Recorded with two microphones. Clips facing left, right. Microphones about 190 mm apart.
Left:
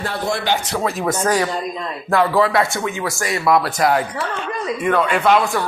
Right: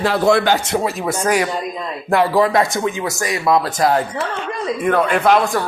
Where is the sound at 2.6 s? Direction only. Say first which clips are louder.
Right 2 dB; 20° right (ahead or behind).